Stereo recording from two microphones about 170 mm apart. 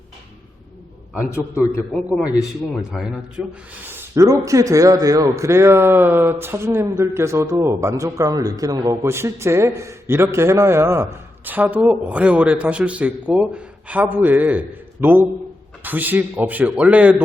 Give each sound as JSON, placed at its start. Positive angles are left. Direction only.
{"t": 1.3, "sound": "a man's voice", "side_deg": 15}
{"t": 2.2, "sound": "a man's voice", "side_deg": -5}